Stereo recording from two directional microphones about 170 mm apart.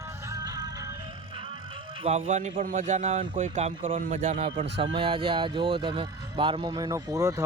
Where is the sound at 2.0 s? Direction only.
40° right (ahead or behind).